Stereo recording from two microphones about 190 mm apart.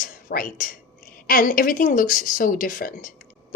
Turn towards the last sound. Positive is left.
turn(degrees=45)  # may be behind; listen again after turning